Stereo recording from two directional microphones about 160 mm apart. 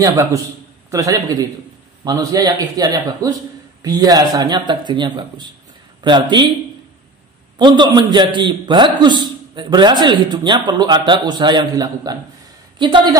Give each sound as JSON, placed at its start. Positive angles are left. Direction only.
{"t": 0.0, "sound": "a man's voice", "side_deg": -20}
{"t": 7.5, "sound": "a man's voice", "side_deg": -30}